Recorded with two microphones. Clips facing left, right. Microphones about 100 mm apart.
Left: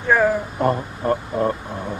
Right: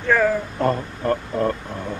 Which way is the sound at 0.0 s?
20° left (ahead or behind).